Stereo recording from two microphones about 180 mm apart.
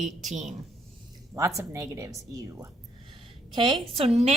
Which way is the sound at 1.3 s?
15° right (ahead or behind).